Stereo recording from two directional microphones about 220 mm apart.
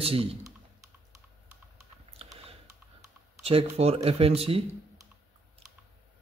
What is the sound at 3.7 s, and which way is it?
Speech, 30° right (ahead or behind).